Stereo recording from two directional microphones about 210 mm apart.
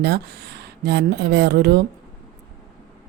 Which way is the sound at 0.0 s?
50° right (ahead or behind).